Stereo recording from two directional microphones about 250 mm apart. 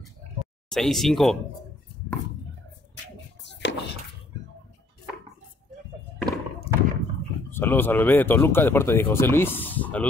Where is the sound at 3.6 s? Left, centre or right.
Left.